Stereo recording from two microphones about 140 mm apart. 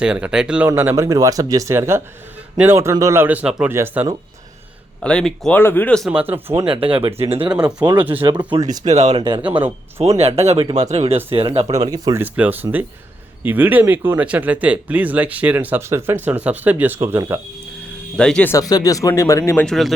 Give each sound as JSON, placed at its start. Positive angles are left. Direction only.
{"t": 0.0, "sound": "speech", "side_deg": -5}
{"t": 0.7, "sound": "speech", "side_deg": -20}
{"t": 5.0, "sound": "speech", "side_deg": 5}
{"t": 6.7, "sound": "speech", "side_deg": -40}
{"t": 7.9, "sound": "speech", "side_deg": -10}
{"t": 8.2, "sound": "speech", "side_deg": -35}
{"t": 8.8, "sound": "speech", "side_deg": -55}
{"t": 9.1, "sound": "speech", "side_deg": -35}
{"t": 10.0, "sound": "speech", "side_deg": -50}
{"t": 11.9, "sound": "speech", "side_deg": -25}
{"t": 12.2, "sound": "speech", "side_deg": -15}
{"t": 18.2, "sound": "speech", "side_deg": 5}
{"t": 18.5, "sound": "speech", "side_deg": 25}
{"t": 19.5, "sound": "speech", "side_deg": 5}